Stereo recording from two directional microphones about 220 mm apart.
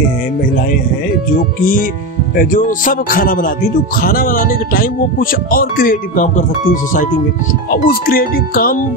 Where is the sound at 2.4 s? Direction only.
35° left (ahead or behind).